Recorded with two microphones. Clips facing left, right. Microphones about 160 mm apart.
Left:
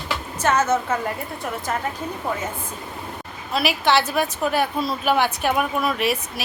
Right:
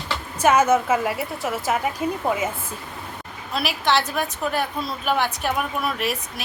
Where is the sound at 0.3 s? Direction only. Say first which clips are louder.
Right 3 dB; 10° right (ahead or behind).